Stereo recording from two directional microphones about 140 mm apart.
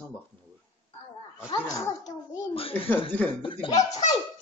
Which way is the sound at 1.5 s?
25° left (ahead or behind).